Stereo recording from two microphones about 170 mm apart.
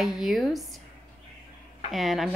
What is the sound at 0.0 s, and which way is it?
Speech, centre (ahead or behind).